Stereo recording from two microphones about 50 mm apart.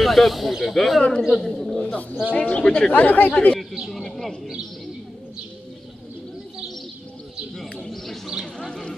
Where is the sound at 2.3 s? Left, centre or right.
Left.